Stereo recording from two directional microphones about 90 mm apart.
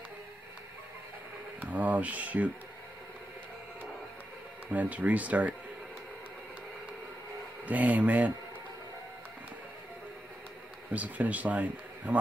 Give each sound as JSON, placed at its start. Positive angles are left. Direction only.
{"t": 1.6, "sound": "speech", "side_deg": -15}
{"t": 4.6, "sound": "a man's voice", "side_deg": -15}
{"t": 7.6, "sound": "a man's voice", "side_deg": -15}
{"t": 10.9, "sound": "a man's voice", "side_deg": -15}